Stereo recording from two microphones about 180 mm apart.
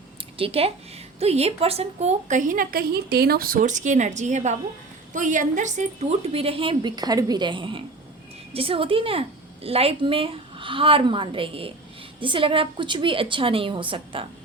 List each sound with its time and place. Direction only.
0.3 s a woman's voice: 30° right (ahead or behind)